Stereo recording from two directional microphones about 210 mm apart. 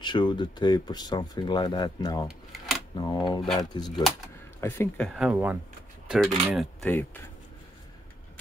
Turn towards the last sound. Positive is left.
turn(degrees=10)  # may be behind; listen again after turning